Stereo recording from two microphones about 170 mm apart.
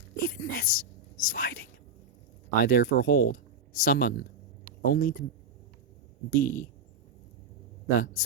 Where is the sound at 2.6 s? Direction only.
55° left (ahead or behind).